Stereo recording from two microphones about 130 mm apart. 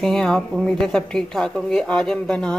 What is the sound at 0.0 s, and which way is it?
Speech, 5° left (ahead or behind).